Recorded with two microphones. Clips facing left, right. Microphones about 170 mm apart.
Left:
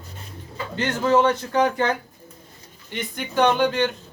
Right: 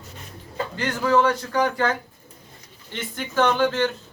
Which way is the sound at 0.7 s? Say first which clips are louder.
Left 1 dB; 25° left (ahead or behind).